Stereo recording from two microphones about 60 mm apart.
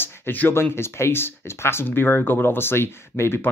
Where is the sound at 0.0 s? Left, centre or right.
Left.